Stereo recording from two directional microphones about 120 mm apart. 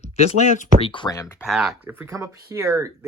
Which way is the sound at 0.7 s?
45° left (ahead or behind).